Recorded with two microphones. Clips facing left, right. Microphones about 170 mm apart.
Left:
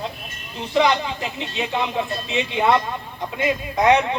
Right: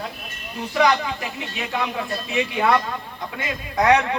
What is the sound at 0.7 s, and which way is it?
Speech, 20° left (ahead or behind).